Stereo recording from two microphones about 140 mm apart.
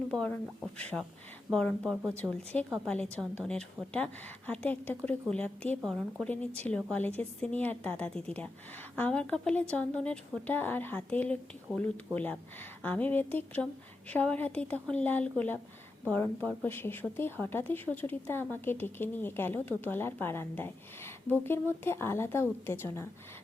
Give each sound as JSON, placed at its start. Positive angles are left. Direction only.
{"t": 0.1, "sound": "speech", "side_deg": 5}
{"t": 5.8, "sound": "speech", "side_deg": 0}
{"t": 6.2, "sound": "speech", "side_deg": 10}